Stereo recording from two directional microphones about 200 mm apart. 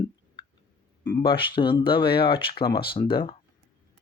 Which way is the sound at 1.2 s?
25° left (ahead or behind).